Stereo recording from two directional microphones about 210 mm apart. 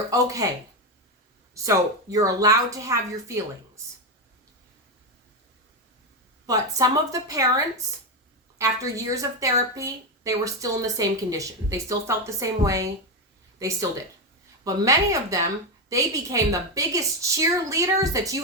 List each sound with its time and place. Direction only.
0.1 s a woman's voice: 15° right (ahead or behind)
1.5 s a woman's voice: 15° right (ahead or behind)
6.4 s a woman's voice: 15° right (ahead or behind)